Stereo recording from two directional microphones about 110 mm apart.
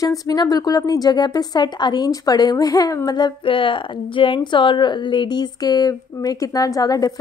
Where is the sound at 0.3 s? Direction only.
35° left (ahead or behind).